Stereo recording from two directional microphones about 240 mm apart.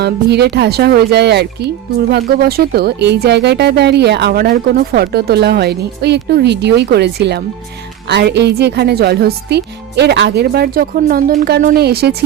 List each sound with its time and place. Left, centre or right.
0.0 s speech: right